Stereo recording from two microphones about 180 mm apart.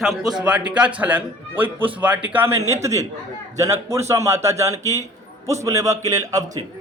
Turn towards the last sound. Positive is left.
turn(degrees=-20)  # may be behind; listen again after turning